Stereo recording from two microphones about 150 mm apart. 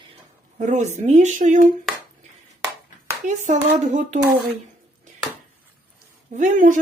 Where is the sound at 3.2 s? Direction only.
50° right (ahead or behind).